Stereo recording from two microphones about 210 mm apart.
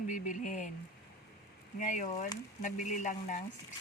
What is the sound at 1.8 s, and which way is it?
Speech, 35° left (ahead or behind).